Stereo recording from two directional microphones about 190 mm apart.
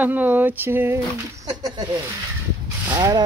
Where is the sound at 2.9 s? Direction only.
20° right (ahead or behind).